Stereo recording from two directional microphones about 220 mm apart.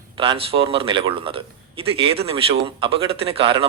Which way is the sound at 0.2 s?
25° right (ahead or behind).